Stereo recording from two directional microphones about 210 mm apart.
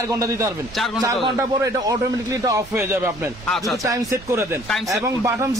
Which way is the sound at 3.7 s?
15° right (ahead or behind).